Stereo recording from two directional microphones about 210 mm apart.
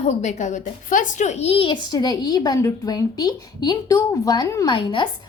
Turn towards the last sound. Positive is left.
turn(degrees=20)  # may be behind; listen again after turning